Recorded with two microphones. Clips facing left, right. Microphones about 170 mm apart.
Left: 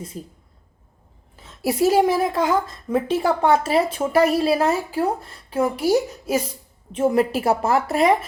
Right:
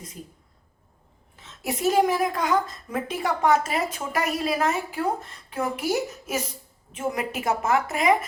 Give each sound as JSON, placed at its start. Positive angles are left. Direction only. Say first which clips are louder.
{"t": 0.1, "sound": "a woman's voice", "louder": "left 6 dB", "side_deg": 30}
{"t": 1.5, "sound": "a woman's voice", "louder": "left 6 dB", "side_deg": 35}